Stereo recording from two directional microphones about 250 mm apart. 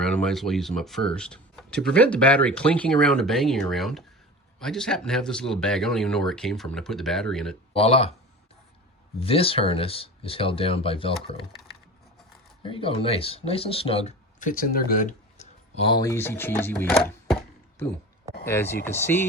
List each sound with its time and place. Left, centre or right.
0.0 s speech: centre
7.7 s speech: left
9.2 s speech: left
12.6 s speech: left; by 17.3 s centre
18.4 s speech: centre